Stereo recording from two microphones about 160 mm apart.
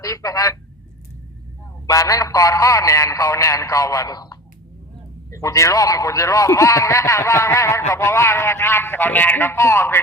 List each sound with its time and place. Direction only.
0.0 s a man's voice: 20° left (ahead or behind)
1.9 s a man's voice: 20° left (ahead or behind)